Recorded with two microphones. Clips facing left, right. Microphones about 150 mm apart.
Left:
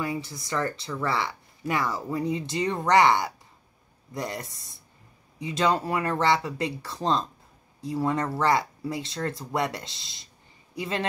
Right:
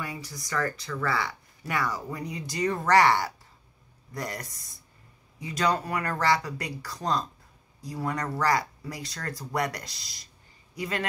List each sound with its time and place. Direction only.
0.0 s speech: 25° left (ahead or behind)